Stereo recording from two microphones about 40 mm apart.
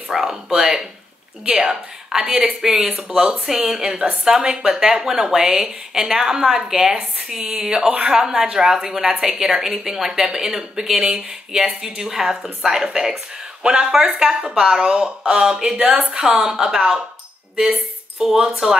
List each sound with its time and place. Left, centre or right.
0.1 s a woman's voice: centre
1.4 s a woman's voice: right
14.2 s speech: right
14.6 s a woman's voice: centre
18.2 s a woman's voice: centre